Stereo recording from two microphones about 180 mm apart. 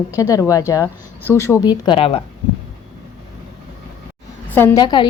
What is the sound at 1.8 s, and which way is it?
Speech, 30° left (ahead or behind).